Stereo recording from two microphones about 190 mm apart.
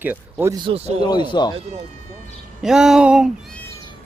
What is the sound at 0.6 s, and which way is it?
Speech, 30° right (ahead or behind).